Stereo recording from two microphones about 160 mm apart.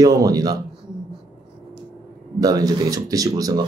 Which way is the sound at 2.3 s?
25° right (ahead or behind).